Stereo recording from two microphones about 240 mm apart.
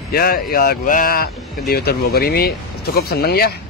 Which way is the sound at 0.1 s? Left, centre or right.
Left.